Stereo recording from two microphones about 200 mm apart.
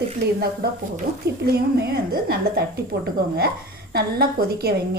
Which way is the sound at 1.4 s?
55° right (ahead or behind).